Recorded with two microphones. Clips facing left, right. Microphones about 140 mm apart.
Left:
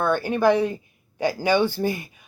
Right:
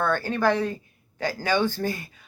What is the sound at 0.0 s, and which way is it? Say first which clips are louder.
A woman's voice: left 3 dB; 15° left (ahead or behind).